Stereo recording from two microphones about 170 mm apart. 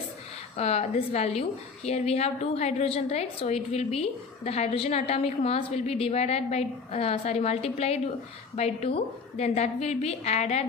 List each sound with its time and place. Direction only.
0.5 s a woman's voice: 40° left (ahead or behind)